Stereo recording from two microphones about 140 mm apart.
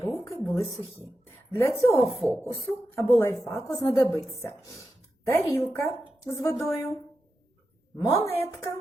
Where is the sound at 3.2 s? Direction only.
20° left (ahead or behind).